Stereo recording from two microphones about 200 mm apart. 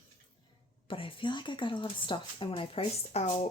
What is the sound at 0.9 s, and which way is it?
A woman's voice, 25° left (ahead or behind).